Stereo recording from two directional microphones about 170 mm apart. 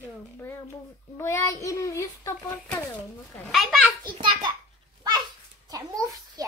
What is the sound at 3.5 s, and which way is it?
Speech, centre (ahead or behind).